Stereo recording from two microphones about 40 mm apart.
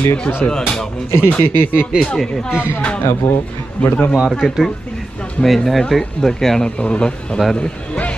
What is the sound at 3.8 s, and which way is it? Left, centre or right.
Speech, left.